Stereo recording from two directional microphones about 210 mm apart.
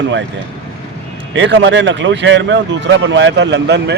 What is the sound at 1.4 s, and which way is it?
Speech, 60° right (ahead or behind).